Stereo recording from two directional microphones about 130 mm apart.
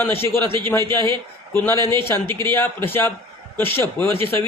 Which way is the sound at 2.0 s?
20° left (ahead or behind).